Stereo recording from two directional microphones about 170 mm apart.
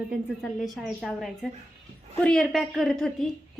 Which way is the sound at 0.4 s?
Centre (ahead or behind).